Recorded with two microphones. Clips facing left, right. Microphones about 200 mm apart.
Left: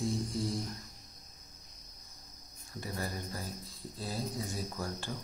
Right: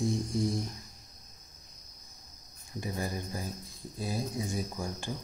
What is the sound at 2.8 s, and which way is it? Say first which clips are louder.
Speech: right 3 dB; 15° right (ahead or behind).